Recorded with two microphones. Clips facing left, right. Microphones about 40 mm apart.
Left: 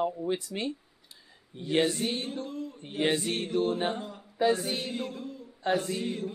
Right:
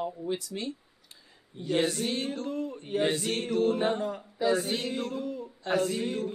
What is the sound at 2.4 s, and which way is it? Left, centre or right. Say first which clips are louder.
Speech: right 4 dB; right.